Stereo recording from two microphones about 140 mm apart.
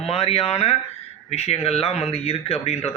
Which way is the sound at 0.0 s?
45° left (ahead or behind).